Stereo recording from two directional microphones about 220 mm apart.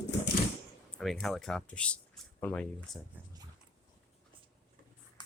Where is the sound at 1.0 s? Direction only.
Centre (ahead or behind).